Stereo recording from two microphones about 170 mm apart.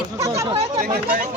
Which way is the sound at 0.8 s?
55° right (ahead or behind).